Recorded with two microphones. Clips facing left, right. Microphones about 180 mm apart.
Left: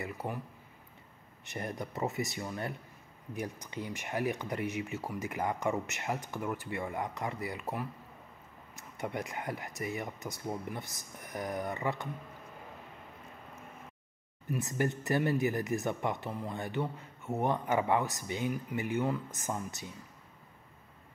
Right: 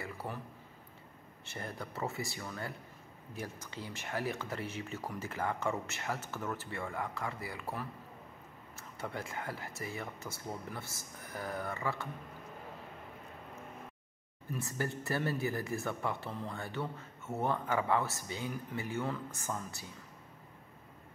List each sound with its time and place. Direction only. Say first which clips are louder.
0.0 s speech: left 4 dB; 20° left (ahead or behind)
1.4 s speech: left 5 dB; 20° left (ahead or behind)
14.5 s speech: left 5 dB; 20° left (ahead or behind)